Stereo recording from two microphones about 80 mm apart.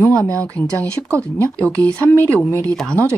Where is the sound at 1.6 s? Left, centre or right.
Centre.